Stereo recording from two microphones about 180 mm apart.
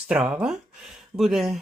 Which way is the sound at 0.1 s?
5° right (ahead or behind).